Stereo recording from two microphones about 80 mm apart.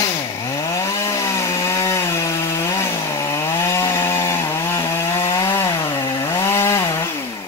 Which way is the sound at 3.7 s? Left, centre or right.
Left.